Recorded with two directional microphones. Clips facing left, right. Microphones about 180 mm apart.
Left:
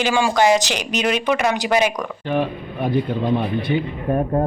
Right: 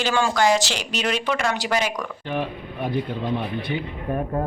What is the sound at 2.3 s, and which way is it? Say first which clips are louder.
Speech: left 6 dB; 75° left (ahead or behind).